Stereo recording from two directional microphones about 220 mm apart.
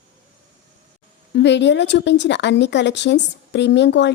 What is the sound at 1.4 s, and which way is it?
A woman's voice, 55° left (ahead or behind).